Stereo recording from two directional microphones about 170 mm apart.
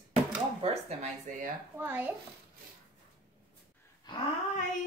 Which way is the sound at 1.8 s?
10° right (ahead or behind).